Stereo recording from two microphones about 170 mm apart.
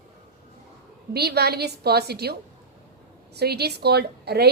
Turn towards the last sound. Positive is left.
turn(degrees=-70)  # may be behind; listen again after turning